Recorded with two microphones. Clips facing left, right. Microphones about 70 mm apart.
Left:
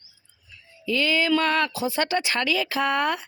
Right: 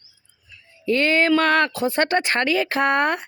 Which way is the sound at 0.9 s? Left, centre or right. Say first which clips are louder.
Right 4 dB; right.